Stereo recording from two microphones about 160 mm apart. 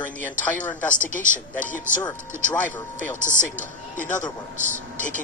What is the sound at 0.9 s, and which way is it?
Speech, 55° left (ahead or behind).